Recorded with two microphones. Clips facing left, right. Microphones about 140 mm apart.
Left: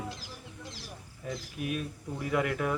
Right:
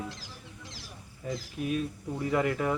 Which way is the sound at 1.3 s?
10° left (ahead or behind).